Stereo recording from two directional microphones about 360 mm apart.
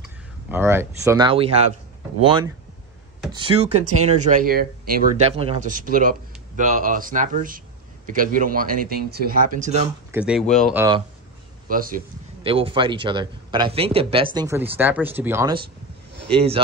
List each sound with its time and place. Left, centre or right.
0.5 s a man's voice: centre; by 9.7 s right
10.1 s speech: centre
11.7 s a man's voice: right